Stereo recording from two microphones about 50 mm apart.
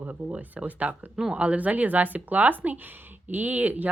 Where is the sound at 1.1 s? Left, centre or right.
Right.